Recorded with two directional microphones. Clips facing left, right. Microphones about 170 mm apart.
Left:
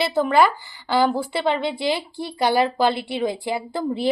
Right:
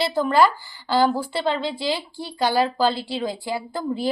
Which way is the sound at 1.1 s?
20° left (ahead or behind).